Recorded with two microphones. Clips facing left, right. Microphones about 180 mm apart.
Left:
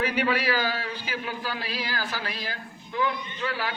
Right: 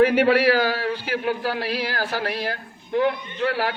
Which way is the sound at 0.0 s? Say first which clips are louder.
Right 9 dB; 65° right (ahead or behind).